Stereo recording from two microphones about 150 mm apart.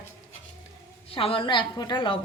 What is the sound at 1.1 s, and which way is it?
Speech, 40° left (ahead or behind).